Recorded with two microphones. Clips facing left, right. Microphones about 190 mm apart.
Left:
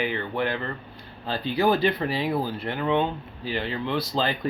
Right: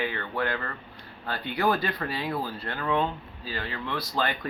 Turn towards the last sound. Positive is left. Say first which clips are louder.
# left 4 dB
turn(degrees=25)  # may be behind; listen again after turning